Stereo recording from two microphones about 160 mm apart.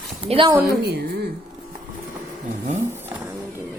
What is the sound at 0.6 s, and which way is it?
Speech, 85° right.